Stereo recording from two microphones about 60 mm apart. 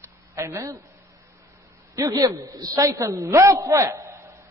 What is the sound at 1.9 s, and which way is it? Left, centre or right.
A man's voice, right.